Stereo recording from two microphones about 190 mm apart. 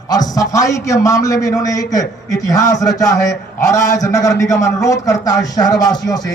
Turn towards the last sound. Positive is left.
turn(degrees=20)  # may be behind; listen again after turning